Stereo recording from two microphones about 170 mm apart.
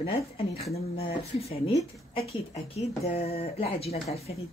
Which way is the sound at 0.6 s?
40° left (ahead or behind).